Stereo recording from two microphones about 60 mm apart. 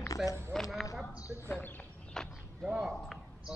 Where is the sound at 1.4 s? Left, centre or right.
Left.